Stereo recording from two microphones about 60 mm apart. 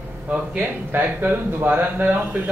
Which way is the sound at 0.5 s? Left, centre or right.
Right.